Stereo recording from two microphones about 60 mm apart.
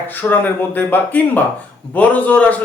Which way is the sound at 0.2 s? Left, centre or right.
Left.